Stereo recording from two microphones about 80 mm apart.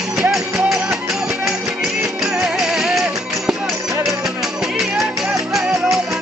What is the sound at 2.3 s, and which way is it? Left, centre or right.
Music, centre.